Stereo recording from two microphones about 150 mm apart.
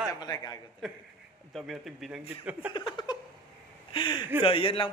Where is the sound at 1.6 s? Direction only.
Centre (ahead or behind).